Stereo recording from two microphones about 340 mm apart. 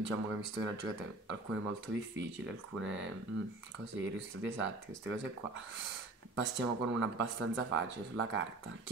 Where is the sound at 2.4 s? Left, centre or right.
Right.